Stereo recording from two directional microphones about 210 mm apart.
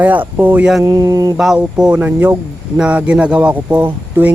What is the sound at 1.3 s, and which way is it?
Speech, centre (ahead or behind).